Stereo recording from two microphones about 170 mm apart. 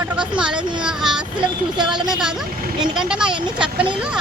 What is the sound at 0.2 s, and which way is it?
Speech, 5° right (ahead or behind).